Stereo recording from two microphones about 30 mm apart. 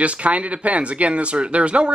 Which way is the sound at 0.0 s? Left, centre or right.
Right.